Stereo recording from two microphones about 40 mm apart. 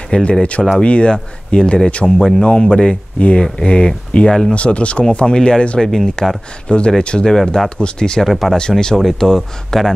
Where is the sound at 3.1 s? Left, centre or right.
Left.